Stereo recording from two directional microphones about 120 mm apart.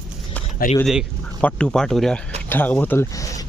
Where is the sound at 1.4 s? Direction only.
10° left (ahead or behind).